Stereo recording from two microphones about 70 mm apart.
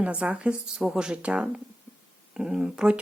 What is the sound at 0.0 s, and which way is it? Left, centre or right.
A woman's voice, centre.